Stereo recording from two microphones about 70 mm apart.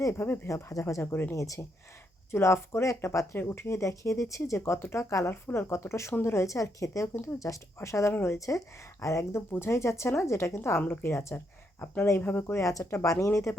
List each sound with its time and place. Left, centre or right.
0.0 s a woman's voice: left
1.0 s speech: left
1.3 s a woman's voice: left
2.3 s speech: left
3.3 s a woman's voice: left
8.1 s speech: left
8.4 s a woman's voice: left
12.2 s a woman's voice: left